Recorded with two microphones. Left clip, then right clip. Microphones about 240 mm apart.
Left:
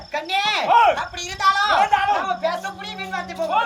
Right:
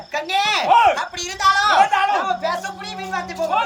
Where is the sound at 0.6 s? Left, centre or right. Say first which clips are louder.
Right 1 dB; centre.